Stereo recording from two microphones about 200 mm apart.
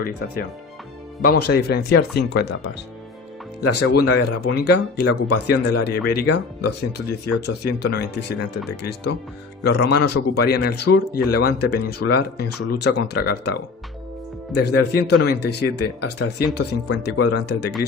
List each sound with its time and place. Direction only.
0.0 s speech: 50° left (ahead or behind)
3.8 s speech: 90° left
4.5 s speech: 55° left (ahead or behind)
14.6 s speech: 55° left (ahead or behind)